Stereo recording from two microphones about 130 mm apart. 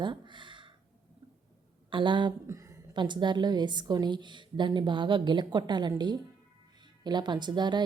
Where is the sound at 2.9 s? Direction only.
35° right (ahead or behind).